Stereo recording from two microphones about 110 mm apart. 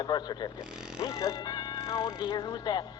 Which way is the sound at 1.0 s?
30° left (ahead or behind).